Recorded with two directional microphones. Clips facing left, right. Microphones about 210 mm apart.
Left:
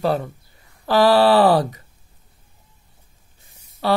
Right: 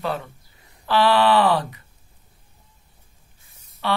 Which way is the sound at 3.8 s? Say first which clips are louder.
Left 5 dB; 40° left (ahead or behind).